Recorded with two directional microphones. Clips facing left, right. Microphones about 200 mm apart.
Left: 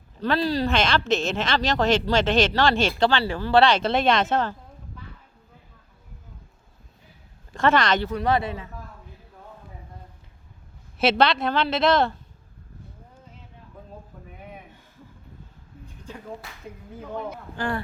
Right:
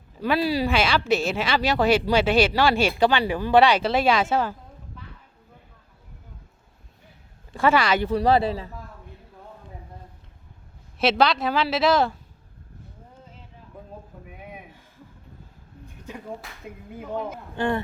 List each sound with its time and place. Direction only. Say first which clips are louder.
0.2 s a woman's voice: right 1 dB; 10° right (ahead or behind)
7.5 s speech: even; 10° right (ahead or behind)
8.1 s speech: right 4 dB; 30° right (ahead or behind)
10.9 s a woman's voice: even; centre (ahead or behind)